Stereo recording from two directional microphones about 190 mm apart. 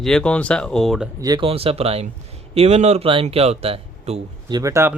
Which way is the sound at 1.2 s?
20° right (ahead or behind).